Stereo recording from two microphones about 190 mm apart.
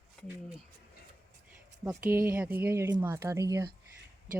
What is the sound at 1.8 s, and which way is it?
Speech, 15° right (ahead or behind).